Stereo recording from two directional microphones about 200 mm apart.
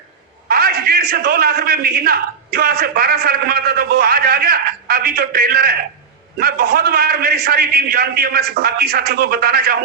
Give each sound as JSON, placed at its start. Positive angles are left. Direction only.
{"t": 0.4, "sound": "a man's voice", "side_deg": -50}